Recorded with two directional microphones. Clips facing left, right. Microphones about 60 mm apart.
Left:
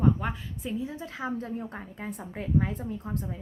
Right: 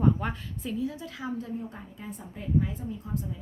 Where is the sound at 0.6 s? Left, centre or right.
Left.